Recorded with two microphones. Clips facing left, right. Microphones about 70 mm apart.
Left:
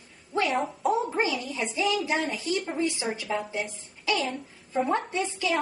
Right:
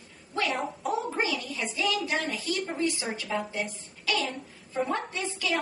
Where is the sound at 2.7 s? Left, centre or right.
Centre.